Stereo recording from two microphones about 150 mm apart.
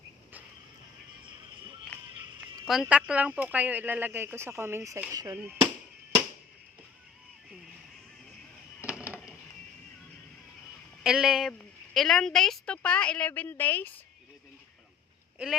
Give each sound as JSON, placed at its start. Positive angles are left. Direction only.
{"t": 2.7, "sound": "speech", "side_deg": 0}
{"t": 5.4, "sound": "speech", "side_deg": -10}
{"t": 8.9, "sound": "a sound", "side_deg": -10}
{"t": 11.0, "sound": "a woman's voice", "side_deg": -5}